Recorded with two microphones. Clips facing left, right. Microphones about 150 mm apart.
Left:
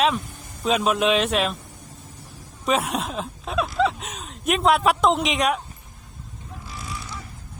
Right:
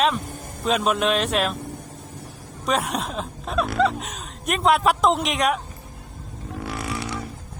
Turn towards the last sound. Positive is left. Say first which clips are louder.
# right 7 dB
turn(degrees=-70)  # may be behind; listen again after turning